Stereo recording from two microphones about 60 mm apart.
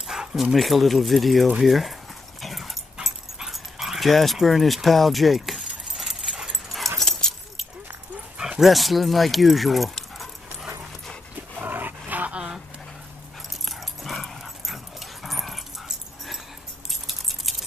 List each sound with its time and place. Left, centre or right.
0.0 s speech: centre
2.4 s dog: centre
7.0 s keys jangling: centre
8.4 s speech: centre
11.6 s dog: right
12.4 s a sound: centre
13.7 s dog: centre
16.9 s keys jangling: centre